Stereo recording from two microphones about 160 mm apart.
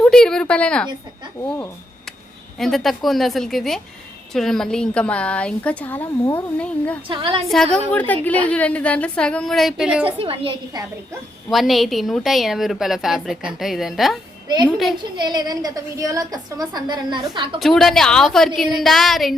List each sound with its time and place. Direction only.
0.0 s a woman's voice: 5° left (ahead or behind)
2.6 s a woman's voice: centre (ahead or behind)
7.1 s a woman's voice: 30° right (ahead or behind)
7.5 s a woman's voice: 5° left (ahead or behind)
10.2 s a woman's voice: 35° right (ahead or behind)
11.5 s a woman's voice: centre (ahead or behind)
15.1 s a woman's voice: 25° right (ahead or behind)
17.6 s a woman's voice: centre (ahead or behind)